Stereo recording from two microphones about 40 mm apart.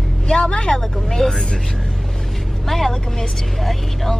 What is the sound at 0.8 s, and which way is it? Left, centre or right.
Speech, centre.